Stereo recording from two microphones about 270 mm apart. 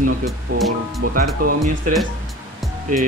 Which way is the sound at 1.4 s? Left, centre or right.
Right.